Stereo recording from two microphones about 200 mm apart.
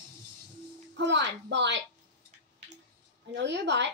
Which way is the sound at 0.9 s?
60° right (ahead or behind).